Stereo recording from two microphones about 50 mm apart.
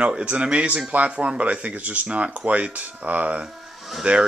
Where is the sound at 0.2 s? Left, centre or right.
Right.